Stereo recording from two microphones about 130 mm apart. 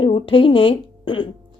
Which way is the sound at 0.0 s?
45° left (ahead or behind).